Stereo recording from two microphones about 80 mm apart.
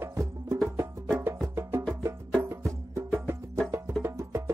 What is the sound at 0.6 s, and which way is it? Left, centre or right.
Music, right.